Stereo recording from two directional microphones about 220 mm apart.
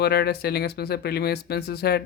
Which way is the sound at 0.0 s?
45° left (ahead or behind).